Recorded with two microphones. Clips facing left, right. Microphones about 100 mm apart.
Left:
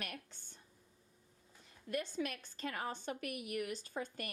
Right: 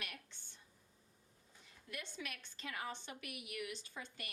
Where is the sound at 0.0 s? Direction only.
45° left (ahead or behind).